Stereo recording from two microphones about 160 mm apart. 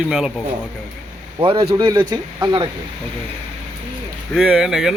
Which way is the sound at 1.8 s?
25° right (ahead or behind).